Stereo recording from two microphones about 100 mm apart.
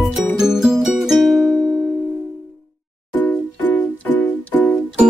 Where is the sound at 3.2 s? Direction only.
20° left (ahead or behind).